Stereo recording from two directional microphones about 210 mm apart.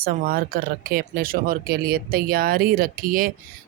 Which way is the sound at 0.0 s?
45° right (ahead or behind).